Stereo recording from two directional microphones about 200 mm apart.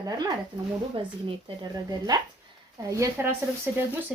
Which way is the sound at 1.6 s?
20° right (ahead or behind).